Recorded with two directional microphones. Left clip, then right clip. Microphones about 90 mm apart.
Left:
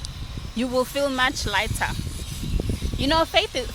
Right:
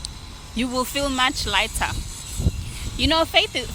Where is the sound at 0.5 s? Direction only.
30° left (ahead or behind).